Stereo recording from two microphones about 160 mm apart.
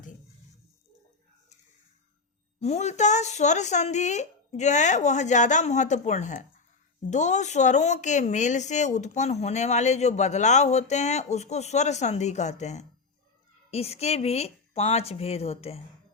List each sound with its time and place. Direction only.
2.6 s a woman's voice: 40° left (ahead or behind)